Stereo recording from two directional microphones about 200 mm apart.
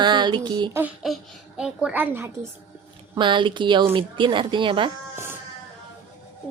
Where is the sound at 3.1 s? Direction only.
25° right (ahead or behind).